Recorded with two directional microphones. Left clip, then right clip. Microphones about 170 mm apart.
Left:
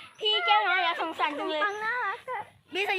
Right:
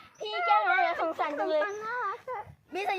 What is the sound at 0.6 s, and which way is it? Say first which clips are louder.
Speech: even; 35° right (ahead or behind).